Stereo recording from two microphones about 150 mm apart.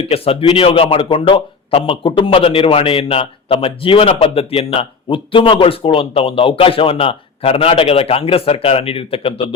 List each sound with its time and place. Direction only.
0.1 s speech: 40° left (ahead or behind)